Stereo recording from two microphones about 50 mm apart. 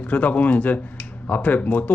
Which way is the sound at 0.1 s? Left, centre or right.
Left.